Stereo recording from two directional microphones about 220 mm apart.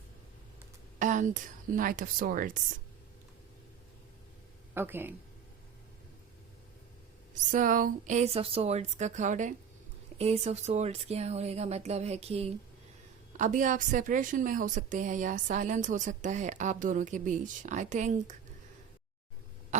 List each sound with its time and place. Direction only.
0.9 s a woman's voice: 35° right (ahead or behind)
4.7 s speech: 10° right (ahead or behind)
7.5 s a woman's voice: 35° right (ahead or behind)